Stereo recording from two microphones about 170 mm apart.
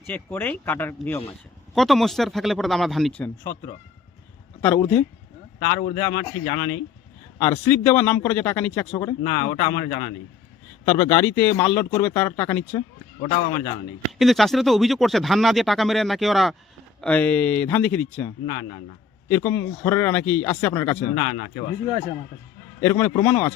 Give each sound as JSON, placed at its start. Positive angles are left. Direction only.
{"t": 0.1, "sound": "speech", "side_deg": 10}
{"t": 1.7, "sound": "speech", "side_deg": 0}
{"t": 4.6, "sound": "speech", "side_deg": 10}
{"t": 5.9, "sound": "a man's voice", "side_deg": 20}
{"t": 9.5, "sound": "a man's voice", "side_deg": 25}
{"t": 13.2, "sound": "a man's voice", "side_deg": 25}
{"t": 14.2, "sound": "speech", "side_deg": 0}
{"t": 21.3, "sound": "speech", "side_deg": 40}
{"t": 22.8, "sound": "speech", "side_deg": 10}